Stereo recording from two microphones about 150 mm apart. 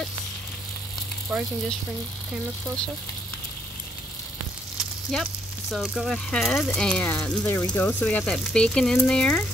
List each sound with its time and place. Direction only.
1.3 s mechanisms: 5° right (ahead or behind)
4.7 s speech: centre (ahead or behind)